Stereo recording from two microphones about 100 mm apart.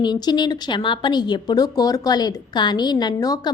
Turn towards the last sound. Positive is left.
turn(degrees=40)  # may be behind; listen again after turning